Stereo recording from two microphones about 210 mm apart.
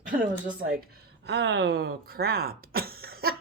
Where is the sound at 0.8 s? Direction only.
50° right (ahead or behind).